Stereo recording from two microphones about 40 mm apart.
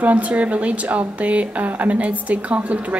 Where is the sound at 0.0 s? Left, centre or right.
Right.